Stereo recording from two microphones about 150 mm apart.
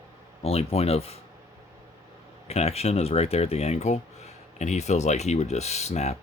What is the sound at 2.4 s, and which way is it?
Speech, 45° left (ahead or behind).